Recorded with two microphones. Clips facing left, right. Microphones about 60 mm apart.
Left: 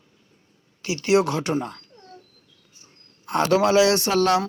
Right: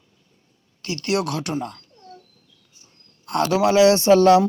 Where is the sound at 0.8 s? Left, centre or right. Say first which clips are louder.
Left 4 dB; centre.